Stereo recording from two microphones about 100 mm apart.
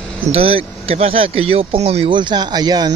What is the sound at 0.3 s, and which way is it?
Speech, 70° right (ahead or behind).